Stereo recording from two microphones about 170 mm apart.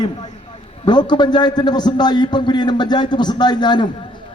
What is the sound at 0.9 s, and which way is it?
A man's voice, 25° left (ahead or behind).